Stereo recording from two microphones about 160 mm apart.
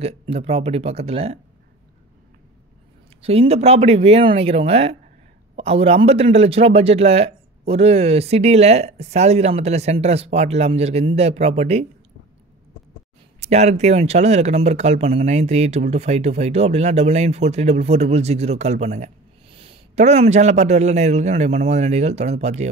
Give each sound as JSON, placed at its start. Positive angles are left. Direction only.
{"t": 0.0, "sound": "a man's voice", "side_deg": -40}
{"t": 3.2, "sound": "a man's voice", "side_deg": -40}
{"t": 13.4, "sound": "speech", "side_deg": -45}